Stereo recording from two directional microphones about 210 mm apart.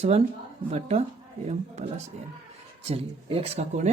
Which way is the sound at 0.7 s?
30° right (ahead or behind).